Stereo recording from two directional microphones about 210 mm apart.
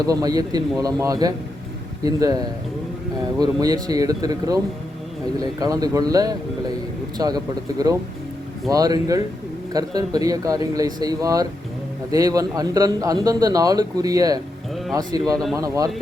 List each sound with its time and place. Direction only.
0.0 s a man's voice: 15° right (ahead or behind)